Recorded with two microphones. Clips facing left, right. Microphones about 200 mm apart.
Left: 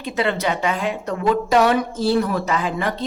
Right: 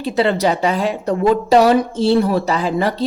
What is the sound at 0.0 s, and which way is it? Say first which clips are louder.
A woman's voice: right 6 dB; 35° right (ahead or behind).